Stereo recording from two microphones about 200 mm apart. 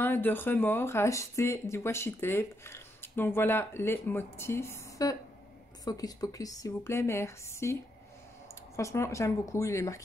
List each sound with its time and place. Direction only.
0.0 s speech: 10° left (ahead or behind)